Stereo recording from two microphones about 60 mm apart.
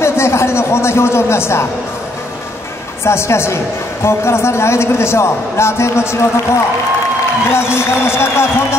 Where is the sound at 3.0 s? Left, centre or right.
Left.